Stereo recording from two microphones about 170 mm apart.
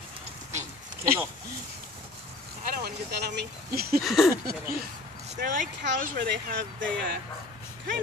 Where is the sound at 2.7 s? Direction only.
70° right (ahead or behind).